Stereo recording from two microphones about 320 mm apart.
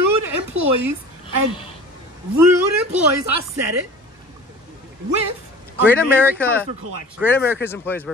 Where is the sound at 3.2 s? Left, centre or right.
Right.